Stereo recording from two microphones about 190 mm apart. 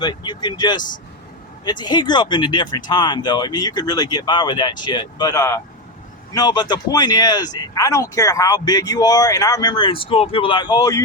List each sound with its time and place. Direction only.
0.0 s speech: 25° left (ahead or behind)